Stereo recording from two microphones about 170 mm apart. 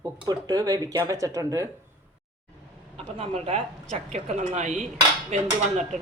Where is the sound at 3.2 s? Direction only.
35° right (ahead or behind).